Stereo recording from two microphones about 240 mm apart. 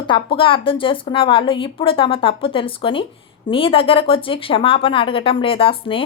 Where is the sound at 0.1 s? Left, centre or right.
Left.